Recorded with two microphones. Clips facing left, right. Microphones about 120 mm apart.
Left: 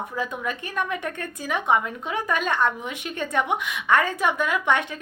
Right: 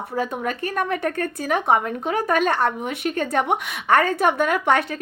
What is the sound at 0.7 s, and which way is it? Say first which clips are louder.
A woman's voice: right 5 dB; 45° right (ahead or behind).